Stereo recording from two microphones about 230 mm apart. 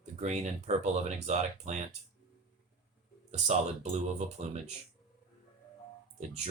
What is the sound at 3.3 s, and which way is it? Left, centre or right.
Speech, right.